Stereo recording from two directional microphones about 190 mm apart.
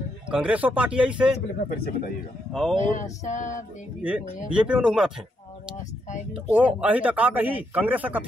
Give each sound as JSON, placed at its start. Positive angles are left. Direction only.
{"t": 0.3, "sound": "a man's voice", "side_deg": -5}
{"t": 1.7, "sound": "speech", "side_deg": 45}
{"t": 2.8, "sound": "female singing", "side_deg": 40}
{"t": 4.0, "sound": "a man's voice", "side_deg": -5}
{"t": 6.3, "sound": "a man's voice", "side_deg": -10}